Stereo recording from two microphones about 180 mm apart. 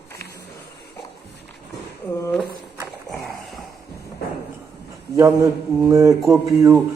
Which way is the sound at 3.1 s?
20° left (ahead or behind).